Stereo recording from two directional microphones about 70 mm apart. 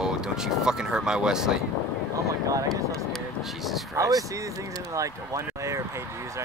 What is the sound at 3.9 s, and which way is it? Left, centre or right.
Speech, right.